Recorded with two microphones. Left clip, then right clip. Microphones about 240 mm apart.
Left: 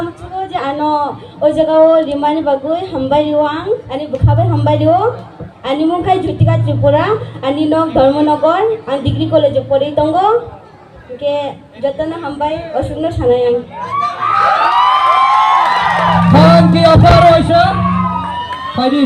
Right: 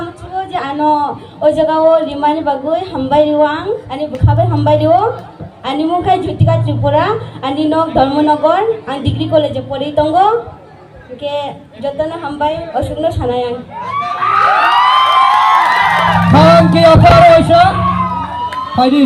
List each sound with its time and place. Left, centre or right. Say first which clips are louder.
0.5 s a woman's voice: right 2 dB; right
14.2 s a sound: right 2 dB; right
16.3 s a man's voice: right 2 dB; right